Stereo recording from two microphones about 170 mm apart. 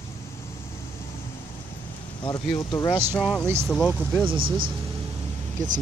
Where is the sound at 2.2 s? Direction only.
20° left (ahead or behind).